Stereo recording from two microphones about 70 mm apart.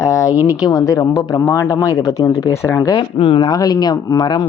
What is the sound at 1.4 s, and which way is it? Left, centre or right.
Speech, left.